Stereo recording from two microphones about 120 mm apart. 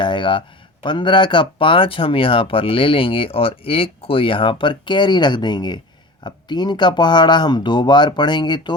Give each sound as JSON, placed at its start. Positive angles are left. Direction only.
{"t": 0.0, "sound": "speech", "side_deg": 40}